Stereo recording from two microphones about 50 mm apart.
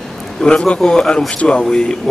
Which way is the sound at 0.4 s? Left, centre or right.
Centre.